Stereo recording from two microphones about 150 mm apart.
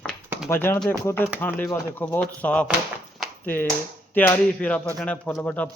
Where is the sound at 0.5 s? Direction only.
15° left (ahead or behind).